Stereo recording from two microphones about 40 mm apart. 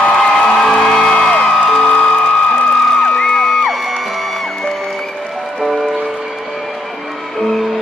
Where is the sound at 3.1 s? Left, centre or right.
Centre.